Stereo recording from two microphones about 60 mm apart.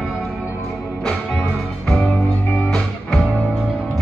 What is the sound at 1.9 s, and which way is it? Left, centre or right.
Music, centre.